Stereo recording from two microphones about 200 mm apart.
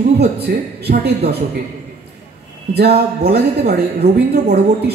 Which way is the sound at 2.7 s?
55° right (ahead or behind).